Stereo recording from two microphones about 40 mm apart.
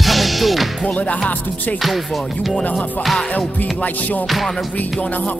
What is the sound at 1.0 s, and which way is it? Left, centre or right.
Music, left.